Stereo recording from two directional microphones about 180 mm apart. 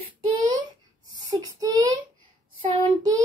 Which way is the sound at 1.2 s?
20° right (ahead or behind).